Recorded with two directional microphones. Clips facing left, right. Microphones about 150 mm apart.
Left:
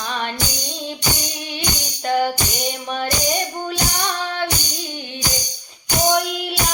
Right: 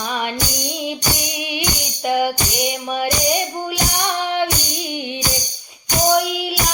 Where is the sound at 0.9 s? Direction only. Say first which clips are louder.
Left 1 dB; 15° right (ahead or behind).